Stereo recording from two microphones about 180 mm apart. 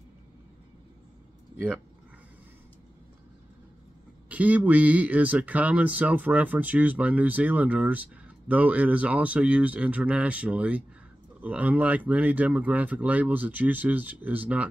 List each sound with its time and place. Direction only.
4.3 s speech: 10° right (ahead or behind)